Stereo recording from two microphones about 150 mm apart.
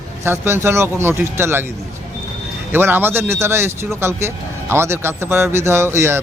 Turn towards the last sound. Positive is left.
turn(degrees=-20)  # may be behind; listen again after turning